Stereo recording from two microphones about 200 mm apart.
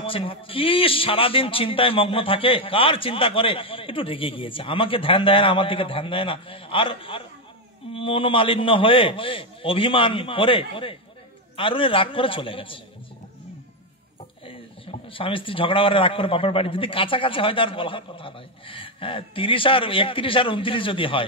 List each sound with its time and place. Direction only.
0.0 s a man's voice: 25° left (ahead or behind)
14.4 s a man's voice: 25° left (ahead or behind)